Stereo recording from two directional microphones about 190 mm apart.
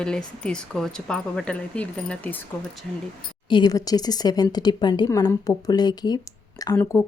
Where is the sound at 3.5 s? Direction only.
25° left (ahead or behind).